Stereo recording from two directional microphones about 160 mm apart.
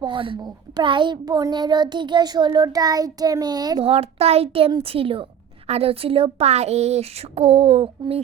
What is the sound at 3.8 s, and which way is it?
Speech, 40° right (ahead or behind).